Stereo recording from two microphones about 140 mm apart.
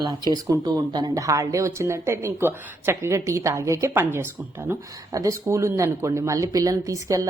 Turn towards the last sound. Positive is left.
turn(degrees=-25)  # may be behind; listen again after turning